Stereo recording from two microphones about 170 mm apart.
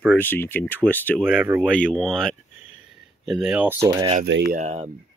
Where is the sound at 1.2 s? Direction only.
5° right (ahead or behind).